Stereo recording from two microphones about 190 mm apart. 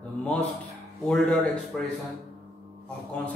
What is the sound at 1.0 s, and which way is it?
Speech, 5° left (ahead or behind).